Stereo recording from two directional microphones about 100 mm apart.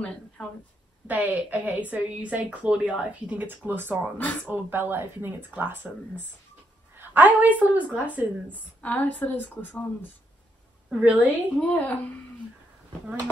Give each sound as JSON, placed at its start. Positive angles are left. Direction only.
{"t": 0.4, "sound": "a woman's voice", "side_deg": 10}
{"t": 1.0, "sound": "a woman's voice", "side_deg": -15}
{"t": 8.8, "sound": "a woman's voice", "side_deg": 15}
{"t": 10.9, "sound": "a woman's voice", "side_deg": -15}
{"t": 11.2, "sound": "a woman's voice", "side_deg": 15}